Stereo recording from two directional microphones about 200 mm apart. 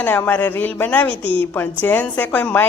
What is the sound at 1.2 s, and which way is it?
Speech, 25° right (ahead or behind).